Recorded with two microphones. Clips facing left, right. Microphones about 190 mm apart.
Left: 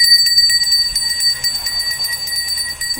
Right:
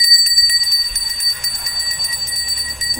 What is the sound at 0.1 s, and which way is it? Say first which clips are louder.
Jingle bell: left 1 dB; 55° right (ahead or behind).